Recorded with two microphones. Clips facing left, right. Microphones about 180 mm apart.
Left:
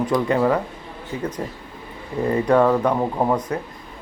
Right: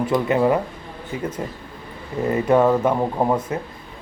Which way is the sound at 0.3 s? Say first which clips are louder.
Right 2 dB; 15° right (ahead or behind).